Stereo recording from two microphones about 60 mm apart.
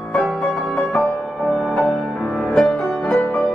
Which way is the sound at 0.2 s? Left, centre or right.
Centre.